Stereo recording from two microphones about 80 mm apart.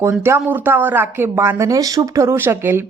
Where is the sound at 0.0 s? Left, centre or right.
Right.